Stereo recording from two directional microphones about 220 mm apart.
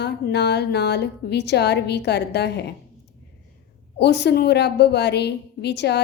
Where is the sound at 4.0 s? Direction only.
50° left (ahead or behind).